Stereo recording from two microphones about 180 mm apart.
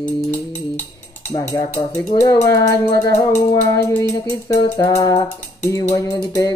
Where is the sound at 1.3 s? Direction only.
20° left (ahead or behind).